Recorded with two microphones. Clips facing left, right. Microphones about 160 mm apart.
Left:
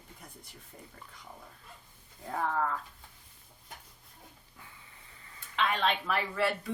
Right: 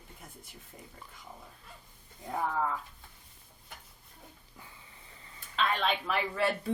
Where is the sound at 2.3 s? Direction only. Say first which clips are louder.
Even; 10° right (ahead or behind).